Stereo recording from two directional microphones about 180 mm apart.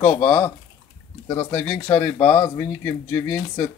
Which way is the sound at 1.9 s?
25° left (ahead or behind).